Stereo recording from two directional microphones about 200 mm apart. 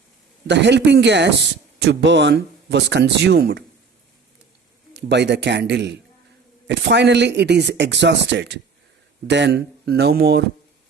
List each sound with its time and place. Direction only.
0.4 s speech: 60° right (ahead or behind)
4.9 s speech: 60° right (ahead or behind)